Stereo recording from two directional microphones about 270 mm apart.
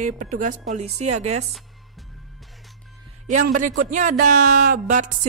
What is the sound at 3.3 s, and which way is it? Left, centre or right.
A woman's voice, right.